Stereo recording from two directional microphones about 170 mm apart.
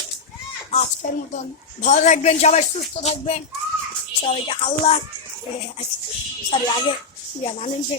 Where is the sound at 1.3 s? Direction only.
45° left (ahead or behind).